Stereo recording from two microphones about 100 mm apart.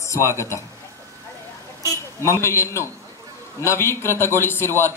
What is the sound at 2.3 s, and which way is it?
A man's voice, 30° left (ahead or behind).